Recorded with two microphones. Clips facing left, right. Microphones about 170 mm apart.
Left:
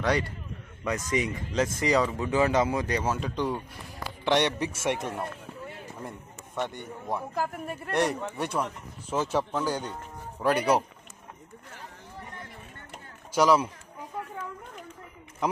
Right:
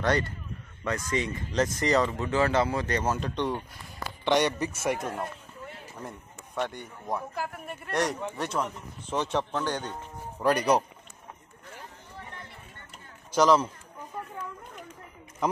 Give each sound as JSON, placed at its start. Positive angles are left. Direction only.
{"t": 0.0, "sound": "a man's voice", "side_deg": 5}
{"t": 5.9, "sound": "a sound", "side_deg": 0}
{"t": 7.3, "sound": "speech", "side_deg": 40}
{"t": 8.4, "sound": "a man's voice", "side_deg": 10}
{"t": 13.3, "sound": "a man's voice", "side_deg": 5}